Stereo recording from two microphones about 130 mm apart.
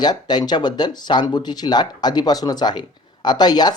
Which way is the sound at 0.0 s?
30° left (ahead or behind).